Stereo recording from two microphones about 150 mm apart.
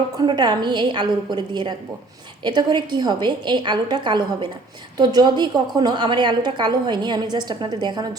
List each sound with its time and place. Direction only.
0.2 s a woman's voice: 30° right (ahead or behind)